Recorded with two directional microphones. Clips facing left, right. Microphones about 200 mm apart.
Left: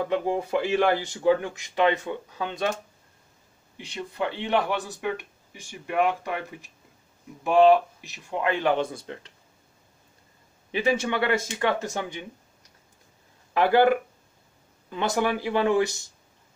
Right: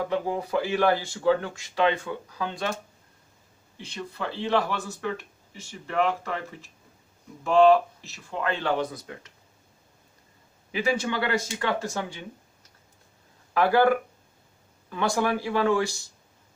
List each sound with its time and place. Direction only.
0.1 s speech: 25° left (ahead or behind)
3.7 s speech: 15° left (ahead or behind)
10.7 s speech: 25° left (ahead or behind)
13.5 s speech: 20° left (ahead or behind)